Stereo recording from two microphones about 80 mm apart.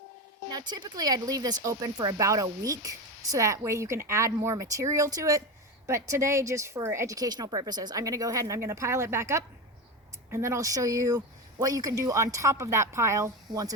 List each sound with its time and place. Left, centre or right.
0.5 s speech: right
7.2 s speech: right